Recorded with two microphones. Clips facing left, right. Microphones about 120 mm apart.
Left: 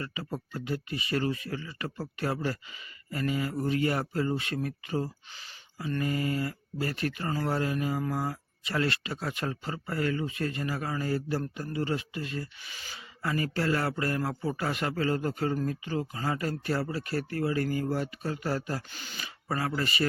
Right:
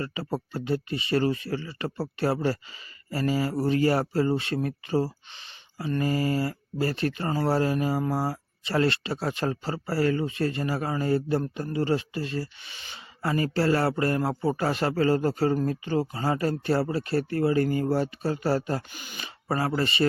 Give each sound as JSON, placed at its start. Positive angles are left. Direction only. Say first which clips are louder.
{"t": 0.0, "sound": "speech", "louder": "right 6 dB", "side_deg": -30}
{"t": 18.9, "sound": "speech", "louder": "right 2 dB", "side_deg": -15}
{"t": 19.2, "sound": "speech", "louder": "right 4 dB", "side_deg": -30}